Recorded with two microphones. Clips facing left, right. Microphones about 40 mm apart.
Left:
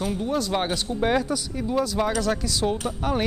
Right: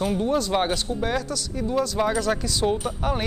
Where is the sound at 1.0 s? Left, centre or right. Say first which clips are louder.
Left 7 dB; centre.